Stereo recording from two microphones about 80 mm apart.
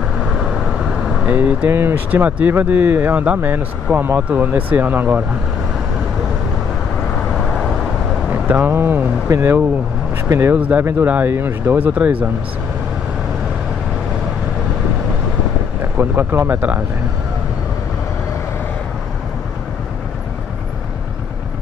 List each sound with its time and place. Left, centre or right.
0.4 s vehicle: centre
1.2 s speech: right
7.3 s vehicle: centre
8.5 s speech: right
16.0 s speech: right